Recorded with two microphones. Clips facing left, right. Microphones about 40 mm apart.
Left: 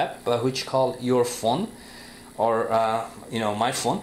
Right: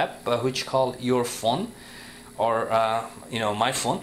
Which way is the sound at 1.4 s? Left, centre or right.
Right.